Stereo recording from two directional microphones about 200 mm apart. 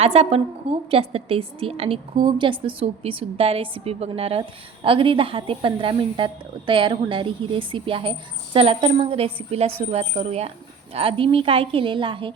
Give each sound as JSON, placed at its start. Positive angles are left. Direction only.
{"t": 0.0, "sound": "a woman's voice", "side_deg": -30}